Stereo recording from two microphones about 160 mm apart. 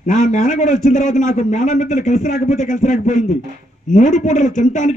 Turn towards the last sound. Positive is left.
turn(degrees=50)  # may be behind; listen again after turning